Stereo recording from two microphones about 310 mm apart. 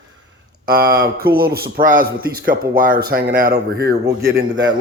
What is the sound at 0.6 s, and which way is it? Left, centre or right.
A man's voice, right.